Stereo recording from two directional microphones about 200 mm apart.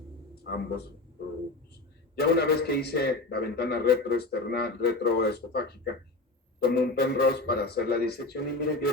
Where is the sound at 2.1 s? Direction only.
55° left (ahead or behind).